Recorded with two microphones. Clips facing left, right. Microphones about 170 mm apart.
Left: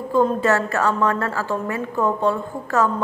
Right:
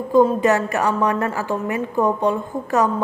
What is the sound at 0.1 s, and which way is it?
A woman's voice, 15° right (ahead or behind).